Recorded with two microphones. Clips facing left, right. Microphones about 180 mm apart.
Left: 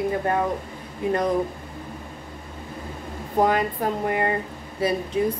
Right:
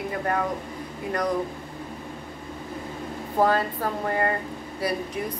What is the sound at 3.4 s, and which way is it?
A woman's voice, 15° left (ahead or behind).